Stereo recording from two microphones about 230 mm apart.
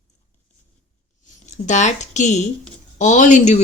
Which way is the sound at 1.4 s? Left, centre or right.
Left.